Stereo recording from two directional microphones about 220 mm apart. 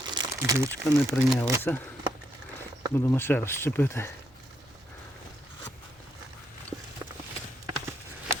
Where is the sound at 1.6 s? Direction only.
10° left (ahead or behind).